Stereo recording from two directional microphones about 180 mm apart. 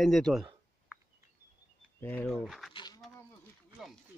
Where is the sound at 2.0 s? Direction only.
10° left (ahead or behind).